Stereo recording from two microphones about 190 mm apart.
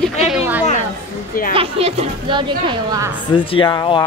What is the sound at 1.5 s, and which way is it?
A woman's voice, 30° right (ahead or behind).